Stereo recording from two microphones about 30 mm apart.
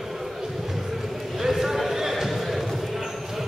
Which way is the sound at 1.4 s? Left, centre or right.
Centre.